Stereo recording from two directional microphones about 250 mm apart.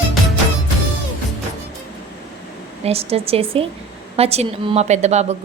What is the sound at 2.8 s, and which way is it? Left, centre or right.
A woman's voice, right.